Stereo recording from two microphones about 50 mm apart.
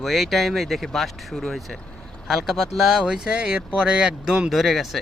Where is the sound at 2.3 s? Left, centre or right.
Centre.